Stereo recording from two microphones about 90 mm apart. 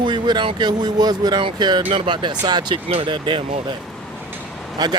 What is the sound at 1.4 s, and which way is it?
Speech, 60° right (ahead or behind).